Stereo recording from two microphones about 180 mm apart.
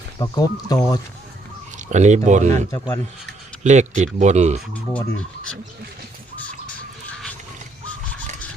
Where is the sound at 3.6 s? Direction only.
40° right (ahead or behind).